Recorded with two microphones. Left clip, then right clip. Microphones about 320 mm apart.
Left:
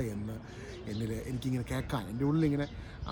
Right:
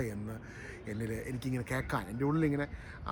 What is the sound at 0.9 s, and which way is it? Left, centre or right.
Speech, centre.